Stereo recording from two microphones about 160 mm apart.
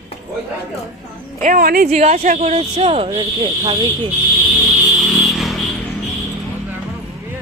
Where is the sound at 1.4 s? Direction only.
65° right (ahead or behind).